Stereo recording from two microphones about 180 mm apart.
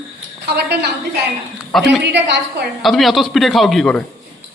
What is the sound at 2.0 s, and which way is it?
Speech, 75° right (ahead or behind).